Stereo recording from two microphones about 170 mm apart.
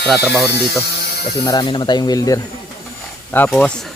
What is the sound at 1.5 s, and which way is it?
Speech, 25° left (ahead or behind).